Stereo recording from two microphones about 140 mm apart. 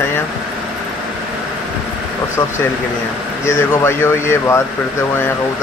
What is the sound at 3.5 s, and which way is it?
Speech, 20° left (ahead or behind).